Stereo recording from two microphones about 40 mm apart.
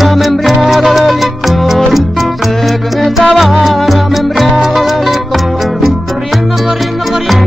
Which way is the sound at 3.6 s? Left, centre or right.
Centre.